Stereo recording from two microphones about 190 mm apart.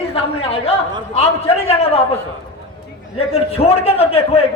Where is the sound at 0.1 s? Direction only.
30° left (ahead or behind).